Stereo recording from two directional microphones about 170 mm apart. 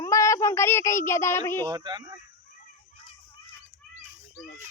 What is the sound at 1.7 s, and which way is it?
Speech, 25° right (ahead or behind).